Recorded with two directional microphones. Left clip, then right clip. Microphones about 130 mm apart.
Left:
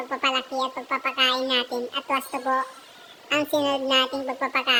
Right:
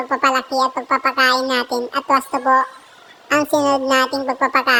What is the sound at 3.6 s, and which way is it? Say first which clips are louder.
Speech: right 7 dB; 40° right (ahead or behind).